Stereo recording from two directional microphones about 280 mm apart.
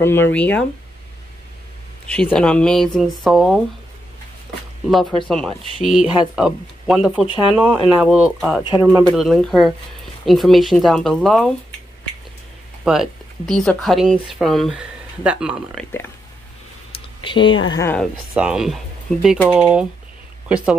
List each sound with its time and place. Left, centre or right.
0.0 s speech: centre
2.0 s speech: centre
5.3 s speech: centre
12.8 s speech: centre
16.9 s a sound: centre
17.7 s speech: centre